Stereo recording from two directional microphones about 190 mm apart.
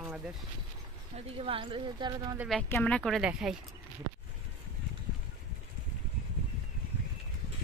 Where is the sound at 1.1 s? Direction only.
30° right (ahead or behind).